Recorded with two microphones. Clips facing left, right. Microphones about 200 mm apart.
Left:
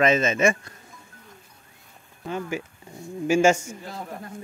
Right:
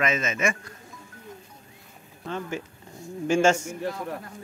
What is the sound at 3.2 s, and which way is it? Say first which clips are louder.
Speech: left 2 dB; 10° left (ahead or behind).